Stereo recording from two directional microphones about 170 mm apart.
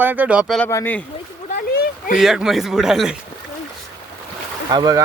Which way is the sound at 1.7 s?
65° left (ahead or behind).